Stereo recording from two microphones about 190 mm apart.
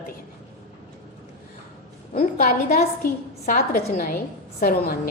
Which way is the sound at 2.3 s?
50° left (ahead or behind).